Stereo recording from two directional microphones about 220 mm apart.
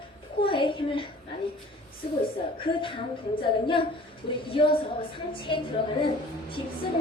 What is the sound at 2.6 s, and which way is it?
A woman's voice, 25° left (ahead or behind).